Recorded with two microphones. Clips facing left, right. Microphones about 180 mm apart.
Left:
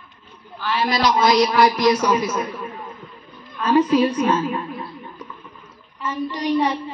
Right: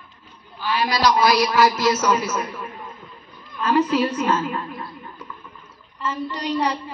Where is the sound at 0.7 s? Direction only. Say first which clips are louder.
Even; 20° left (ahead or behind).